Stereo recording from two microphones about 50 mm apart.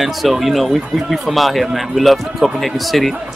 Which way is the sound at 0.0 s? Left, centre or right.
Centre.